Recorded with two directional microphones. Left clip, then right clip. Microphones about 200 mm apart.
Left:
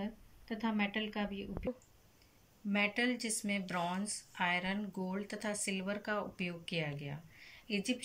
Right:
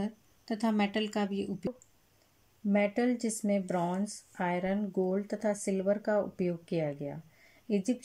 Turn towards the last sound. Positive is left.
turn(degrees=-50)  # may be behind; listen again after turning